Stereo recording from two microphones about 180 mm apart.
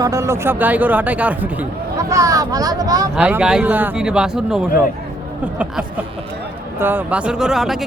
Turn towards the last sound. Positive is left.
turn(degrees=0)  # may be behind; listen again after turning